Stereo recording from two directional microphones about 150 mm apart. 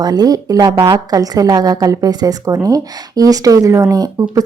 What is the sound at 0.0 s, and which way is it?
A woman's voice, 25° right (ahead or behind).